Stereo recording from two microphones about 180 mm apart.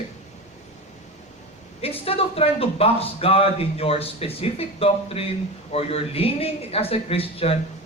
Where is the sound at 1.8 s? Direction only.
30° left (ahead or behind).